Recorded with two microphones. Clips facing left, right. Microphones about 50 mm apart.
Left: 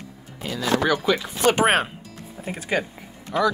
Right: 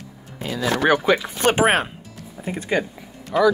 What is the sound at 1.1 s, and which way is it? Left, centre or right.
Speech, right.